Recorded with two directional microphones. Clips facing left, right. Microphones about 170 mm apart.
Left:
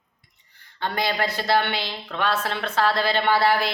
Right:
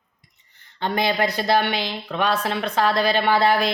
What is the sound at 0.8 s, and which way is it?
Speech, 20° right (ahead or behind).